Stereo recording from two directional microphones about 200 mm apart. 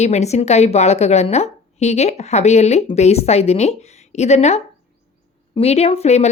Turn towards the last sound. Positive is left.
turn(degrees=35)  # may be behind; listen again after turning